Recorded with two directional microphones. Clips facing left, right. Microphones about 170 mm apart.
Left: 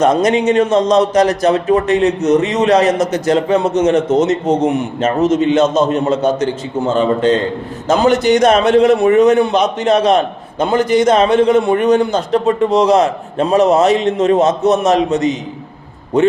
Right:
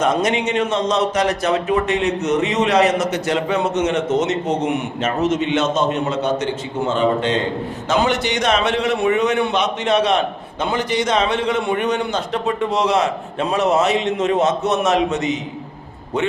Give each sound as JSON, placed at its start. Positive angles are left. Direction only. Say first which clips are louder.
{"t": 0.0, "sound": "speech", "louder": "left 6 dB", "side_deg": 40}
{"t": 7.9, "sound": "a man's voice", "louder": "left 8 dB", "side_deg": 45}